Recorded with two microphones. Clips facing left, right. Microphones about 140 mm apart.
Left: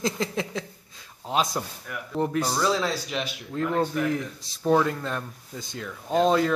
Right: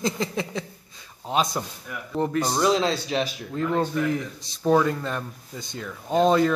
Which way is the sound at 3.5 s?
Centre (ahead or behind).